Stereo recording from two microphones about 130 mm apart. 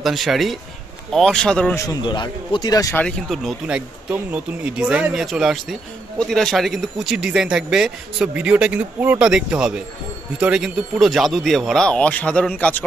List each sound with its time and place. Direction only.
0.0 s a man's voice: centre (ahead or behind)
1.9 s a man's voice: 35° left (ahead or behind)
2.9 s speech: 10° left (ahead or behind)
3.3 s a man's voice: 5° right (ahead or behind)